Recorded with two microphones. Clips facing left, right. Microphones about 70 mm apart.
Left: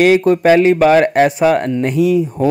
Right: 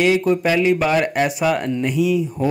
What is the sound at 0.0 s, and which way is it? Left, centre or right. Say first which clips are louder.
Speech: left 6 dB; left.